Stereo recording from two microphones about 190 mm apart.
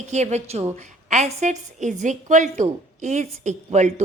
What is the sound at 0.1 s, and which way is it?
A woman's voice, 35° right (ahead or behind).